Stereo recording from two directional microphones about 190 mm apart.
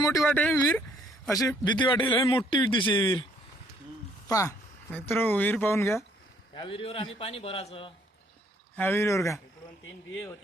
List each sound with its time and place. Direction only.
0.2 s speech: 5° left (ahead or behind)
1.3 s a man's voice: 20° left (ahead or behind)
4.3 s speech: 15° left (ahead or behind)
6.5 s a man's voice: 25° left (ahead or behind)
8.7 s speech: 10° left (ahead or behind)